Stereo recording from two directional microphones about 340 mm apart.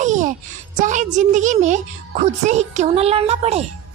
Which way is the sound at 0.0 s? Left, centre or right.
Right.